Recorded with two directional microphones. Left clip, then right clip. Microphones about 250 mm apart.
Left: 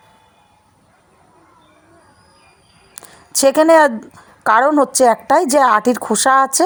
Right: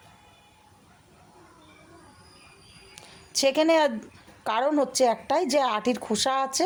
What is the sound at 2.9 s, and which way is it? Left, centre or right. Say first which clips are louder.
Speech: left 7 dB; left.